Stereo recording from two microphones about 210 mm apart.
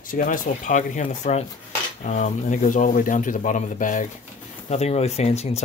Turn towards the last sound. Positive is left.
turn(degrees=30)  # may be behind; listen again after turning